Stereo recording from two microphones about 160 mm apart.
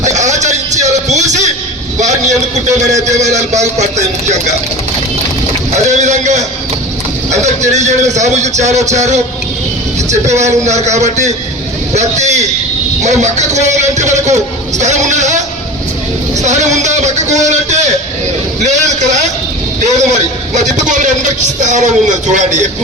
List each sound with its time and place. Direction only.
0.0 s music: 45° right (ahead or behind)
2.6 s a man's voice: 45° right (ahead or behind)
5.7 s a man's voice: 45° right (ahead or behind)
18.6 s vehicle: 45° right (ahead or behind)
20.8 s a man's voice: 50° right (ahead or behind)